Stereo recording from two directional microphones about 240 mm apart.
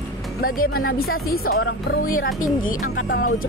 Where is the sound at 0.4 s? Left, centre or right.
Left.